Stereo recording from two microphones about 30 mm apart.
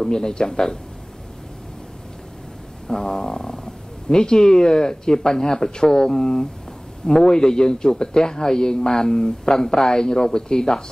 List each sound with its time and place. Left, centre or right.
0.0 s speech: left
2.9 s speech: left